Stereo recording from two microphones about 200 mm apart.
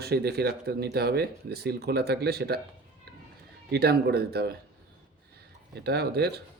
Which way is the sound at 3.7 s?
55° right (ahead or behind).